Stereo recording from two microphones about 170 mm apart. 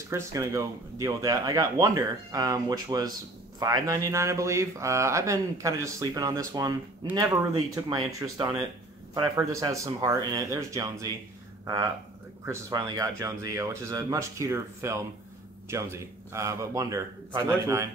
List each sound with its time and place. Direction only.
0.1 s speech: 20° right (ahead or behind)